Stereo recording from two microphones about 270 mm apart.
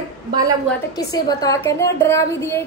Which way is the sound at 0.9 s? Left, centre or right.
Centre.